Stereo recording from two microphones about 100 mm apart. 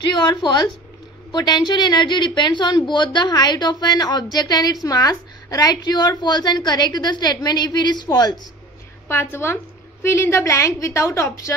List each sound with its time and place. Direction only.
0.1 s a woman's voice: 50° left (ahead or behind)
9.0 s a woman's voice: 20° left (ahead or behind)